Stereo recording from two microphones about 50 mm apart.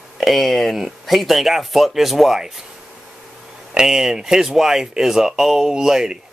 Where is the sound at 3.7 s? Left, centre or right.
Centre.